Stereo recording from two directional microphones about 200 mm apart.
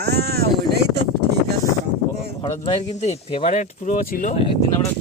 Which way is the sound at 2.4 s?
15° left (ahead or behind).